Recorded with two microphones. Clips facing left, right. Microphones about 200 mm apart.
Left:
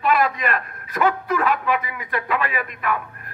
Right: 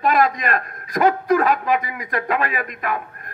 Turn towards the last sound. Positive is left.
turn(degrees=-40)  # may be behind; listen again after turning